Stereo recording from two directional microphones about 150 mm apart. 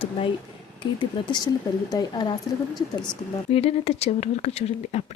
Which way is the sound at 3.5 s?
40° left (ahead or behind).